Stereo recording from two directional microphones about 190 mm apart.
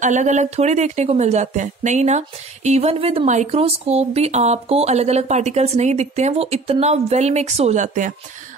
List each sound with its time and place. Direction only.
0.0 s a woman's voice: 40° right (ahead or behind)